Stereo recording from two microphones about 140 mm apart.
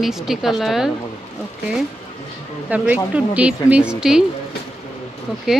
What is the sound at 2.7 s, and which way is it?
Speech, 10° right (ahead or behind).